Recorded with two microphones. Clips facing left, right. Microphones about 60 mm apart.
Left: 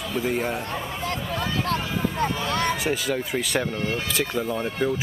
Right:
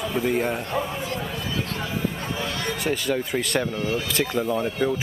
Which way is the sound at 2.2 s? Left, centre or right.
Left.